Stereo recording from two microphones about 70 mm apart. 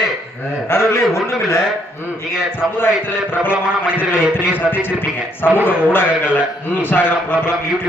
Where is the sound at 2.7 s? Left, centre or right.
Left.